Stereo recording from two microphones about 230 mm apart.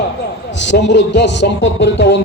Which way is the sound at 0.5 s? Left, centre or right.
Left.